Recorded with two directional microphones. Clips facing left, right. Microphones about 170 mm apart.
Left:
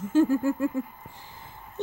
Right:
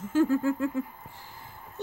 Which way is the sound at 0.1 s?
15° left (ahead or behind).